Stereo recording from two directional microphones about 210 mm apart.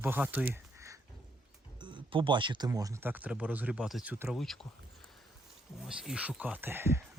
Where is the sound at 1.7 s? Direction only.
20° right (ahead or behind); by 4.6 s centre (ahead or behind).